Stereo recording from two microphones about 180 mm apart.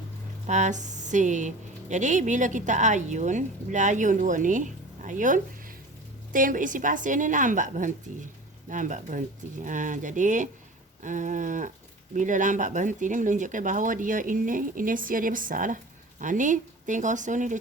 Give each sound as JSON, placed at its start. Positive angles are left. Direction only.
{"t": 0.4, "sound": "speech", "side_deg": -40}